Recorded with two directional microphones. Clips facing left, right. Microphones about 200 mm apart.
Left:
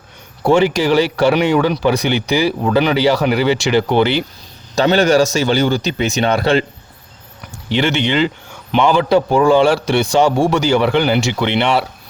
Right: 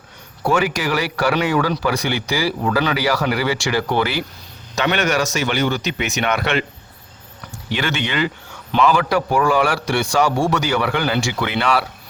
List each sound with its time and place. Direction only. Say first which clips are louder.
0.4 s speech: left 6 dB; 25° left (ahead or behind)
7.7 s speech: left 7 dB; 25° left (ahead or behind)